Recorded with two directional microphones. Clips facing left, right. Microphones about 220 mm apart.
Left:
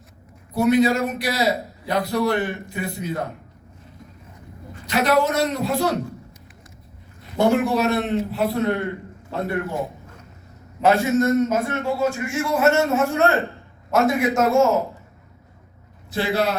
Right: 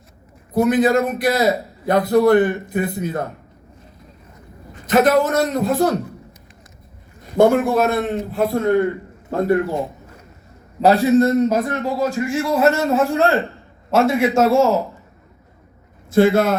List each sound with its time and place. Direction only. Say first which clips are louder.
0.5 s a man's voice: right 2 dB; 50° right (ahead or behind)
4.9 s a man's voice: right 5 dB; 50° right (ahead or behind)
7.3 s a man's voice: right 4 dB; 50° right (ahead or behind)
9.8 s a sound: right 1 dB; 10° right (ahead or behind)
10.8 s a man's voice: right 4 dB; 35° right (ahead or behind)
16.1 s a man's voice: right 8 dB; 50° right (ahead or behind)